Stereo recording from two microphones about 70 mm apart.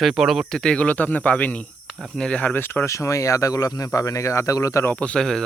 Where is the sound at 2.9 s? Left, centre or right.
Left.